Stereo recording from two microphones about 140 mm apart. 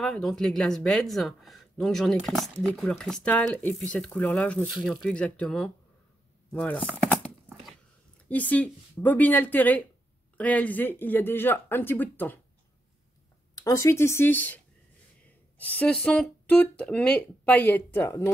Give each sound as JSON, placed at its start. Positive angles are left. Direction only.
{"t": 0.0, "sound": "speech", "side_deg": 5}
{"t": 8.3, "sound": "speech", "side_deg": 10}
{"t": 13.7, "sound": "speech", "side_deg": 20}